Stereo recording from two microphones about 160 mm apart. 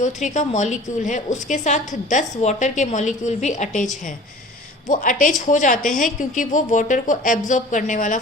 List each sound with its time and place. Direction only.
0.0 s speech: 50° left (ahead or behind)